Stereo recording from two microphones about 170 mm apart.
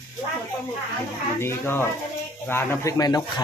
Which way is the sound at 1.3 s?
15° left (ahead or behind).